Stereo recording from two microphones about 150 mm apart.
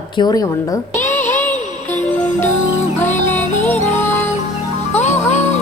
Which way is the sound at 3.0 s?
50° left (ahead or behind).